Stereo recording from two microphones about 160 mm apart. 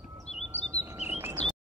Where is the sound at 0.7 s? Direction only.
15° right (ahead or behind).